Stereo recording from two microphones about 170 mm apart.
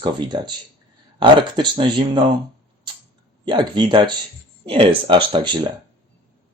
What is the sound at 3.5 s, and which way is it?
Speech, 25° right (ahead or behind).